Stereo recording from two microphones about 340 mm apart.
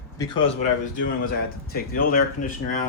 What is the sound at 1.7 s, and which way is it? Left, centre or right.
Speech, left.